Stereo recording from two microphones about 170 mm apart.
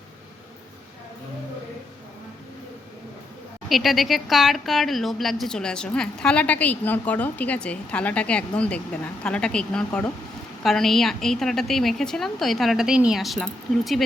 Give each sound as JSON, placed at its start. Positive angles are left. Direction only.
{"t": 3.7, "sound": "speech", "side_deg": 0}